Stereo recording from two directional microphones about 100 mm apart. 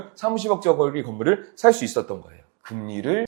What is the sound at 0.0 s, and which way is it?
Speech, 15° right (ahead or behind).